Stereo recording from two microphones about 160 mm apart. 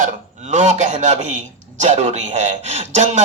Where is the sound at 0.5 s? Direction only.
50° right (ahead or behind).